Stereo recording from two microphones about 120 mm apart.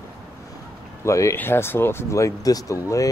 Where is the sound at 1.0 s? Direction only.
25° left (ahead or behind).